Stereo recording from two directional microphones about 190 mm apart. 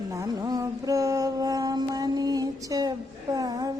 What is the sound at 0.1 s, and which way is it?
Mantra, 20° right (ahead or behind).